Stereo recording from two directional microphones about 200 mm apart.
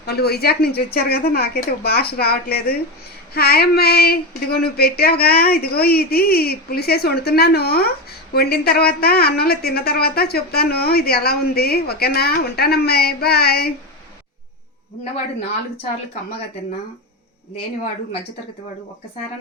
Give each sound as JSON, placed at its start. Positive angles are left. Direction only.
{"t": 0.0, "sound": "speech", "side_deg": 50}